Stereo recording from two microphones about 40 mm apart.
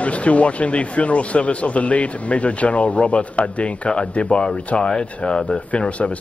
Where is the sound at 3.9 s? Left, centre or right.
Left.